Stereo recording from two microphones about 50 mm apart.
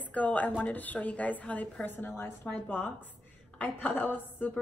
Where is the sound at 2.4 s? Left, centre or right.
Left.